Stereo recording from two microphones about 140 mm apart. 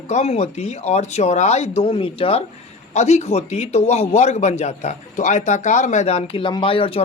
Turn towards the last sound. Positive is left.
turn(degrees=40)  # may be behind; listen again after turning